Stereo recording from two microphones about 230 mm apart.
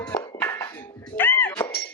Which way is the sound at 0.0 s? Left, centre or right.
Centre.